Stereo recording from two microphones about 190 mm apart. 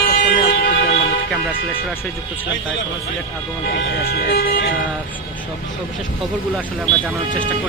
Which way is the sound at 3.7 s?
60° left (ahead or behind).